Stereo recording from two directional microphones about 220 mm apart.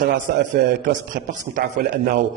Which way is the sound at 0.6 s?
45° right (ahead or behind).